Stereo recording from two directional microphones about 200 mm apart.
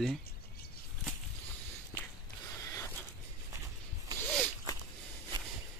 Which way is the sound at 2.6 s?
15° left (ahead or behind).